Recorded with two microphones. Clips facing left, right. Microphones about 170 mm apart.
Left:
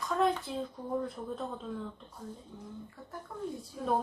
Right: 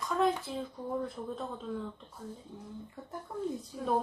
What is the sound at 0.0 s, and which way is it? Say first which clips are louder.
A woman's voice: even; centre (ahead or behind).